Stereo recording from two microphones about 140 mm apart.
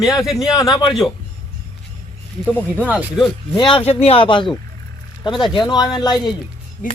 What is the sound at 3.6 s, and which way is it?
Speech, 35° left (ahead or behind).